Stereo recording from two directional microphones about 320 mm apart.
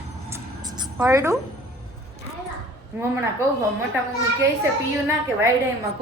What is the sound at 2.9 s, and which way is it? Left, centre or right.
Speech, centre.